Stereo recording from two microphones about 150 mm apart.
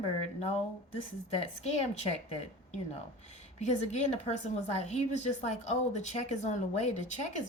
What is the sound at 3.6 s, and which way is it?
A woman's voice, 50° left (ahead or behind).